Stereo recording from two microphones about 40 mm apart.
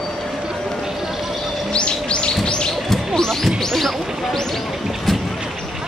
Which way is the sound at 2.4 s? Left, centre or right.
Left.